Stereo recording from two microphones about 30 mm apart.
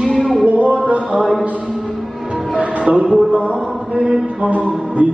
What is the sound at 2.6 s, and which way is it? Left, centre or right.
Music, right.